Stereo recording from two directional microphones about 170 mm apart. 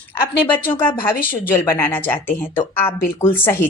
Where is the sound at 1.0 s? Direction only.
10° left (ahead or behind).